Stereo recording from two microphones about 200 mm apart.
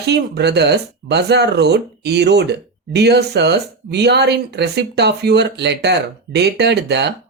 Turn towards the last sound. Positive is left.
turn(degrees=-55)  # may be behind; listen again after turning